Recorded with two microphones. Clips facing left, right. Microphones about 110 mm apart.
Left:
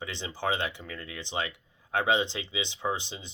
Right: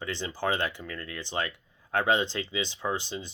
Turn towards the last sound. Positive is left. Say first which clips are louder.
# right 1 dB
turn(degrees=20)  # may be behind; listen again after turning